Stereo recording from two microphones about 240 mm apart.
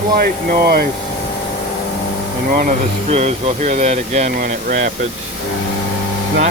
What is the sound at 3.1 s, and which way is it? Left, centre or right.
Speech, right.